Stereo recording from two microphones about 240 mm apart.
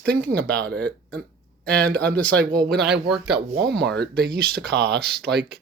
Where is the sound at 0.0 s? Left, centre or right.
Right.